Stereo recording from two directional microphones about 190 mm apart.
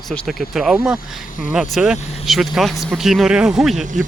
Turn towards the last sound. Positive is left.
turn(degrees=-40)  # may be behind; listen again after turning